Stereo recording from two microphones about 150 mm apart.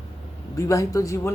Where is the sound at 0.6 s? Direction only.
20° left (ahead or behind).